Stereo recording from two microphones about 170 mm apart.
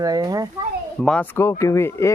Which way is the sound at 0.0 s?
20° right (ahead or behind).